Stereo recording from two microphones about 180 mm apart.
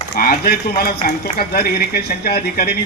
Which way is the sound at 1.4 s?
60° left (ahead or behind).